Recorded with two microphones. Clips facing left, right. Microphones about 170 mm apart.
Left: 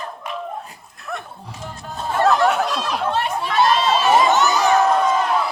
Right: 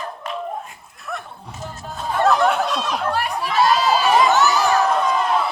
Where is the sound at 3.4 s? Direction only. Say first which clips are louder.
Right 1 dB; centre (ahead or behind).